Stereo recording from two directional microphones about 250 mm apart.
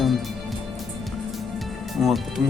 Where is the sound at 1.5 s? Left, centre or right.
Centre.